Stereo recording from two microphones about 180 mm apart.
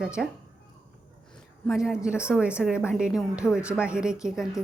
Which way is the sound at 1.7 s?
5° right (ahead or behind).